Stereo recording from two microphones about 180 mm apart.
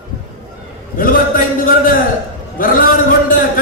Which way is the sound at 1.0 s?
50° left (ahead or behind).